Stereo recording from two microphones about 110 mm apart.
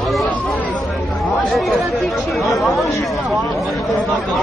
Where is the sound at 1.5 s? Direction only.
Centre (ahead or behind).